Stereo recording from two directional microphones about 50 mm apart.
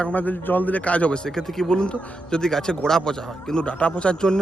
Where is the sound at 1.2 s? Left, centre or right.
Centre.